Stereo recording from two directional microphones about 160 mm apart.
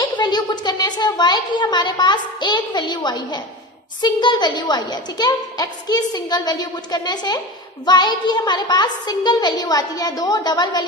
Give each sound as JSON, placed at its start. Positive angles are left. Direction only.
{"t": 0.2, "sound": "a woman's voice", "side_deg": 25}